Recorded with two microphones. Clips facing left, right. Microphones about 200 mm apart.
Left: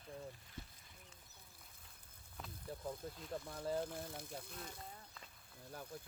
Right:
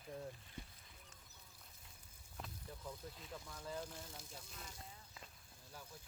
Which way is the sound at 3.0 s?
50° left (ahead or behind).